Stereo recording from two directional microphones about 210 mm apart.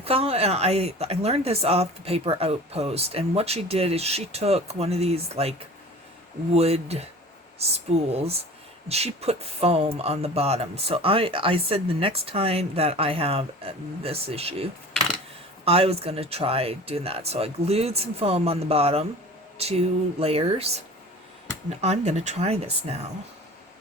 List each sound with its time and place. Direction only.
0.0 s speech: 30° right (ahead or behind)